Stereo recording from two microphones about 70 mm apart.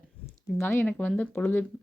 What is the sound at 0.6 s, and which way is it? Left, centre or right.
Speech, left.